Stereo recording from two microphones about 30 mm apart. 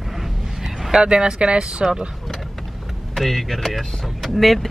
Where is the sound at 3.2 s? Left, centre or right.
Centre.